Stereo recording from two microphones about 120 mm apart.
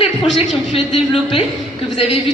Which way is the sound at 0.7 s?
50° left (ahead or behind).